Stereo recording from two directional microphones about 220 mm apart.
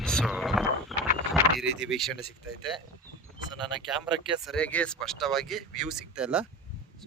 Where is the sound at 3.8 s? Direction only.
Centre (ahead or behind).